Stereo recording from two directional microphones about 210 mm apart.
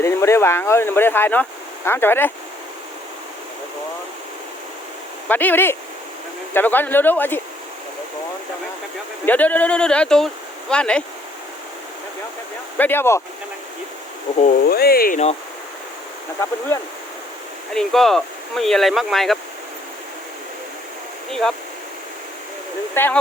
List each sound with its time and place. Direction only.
0.0 s speech: 15° left (ahead or behind)
5.3 s speech: 10° left (ahead or behind)
9.2 s speech: 10° left (ahead or behind)
12.7 s speech: 10° left (ahead or behind)
14.3 s speech: 40° left (ahead or behind)
17.7 s speech: centre (ahead or behind)
21.2 s speech: centre (ahead or behind)
23.0 s speech: 10° left (ahead or behind)